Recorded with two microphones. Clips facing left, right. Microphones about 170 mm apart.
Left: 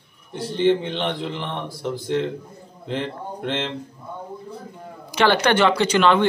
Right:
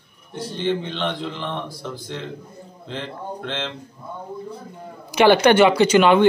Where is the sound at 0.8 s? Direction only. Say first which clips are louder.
Left 1 dB; 15° left (ahead or behind).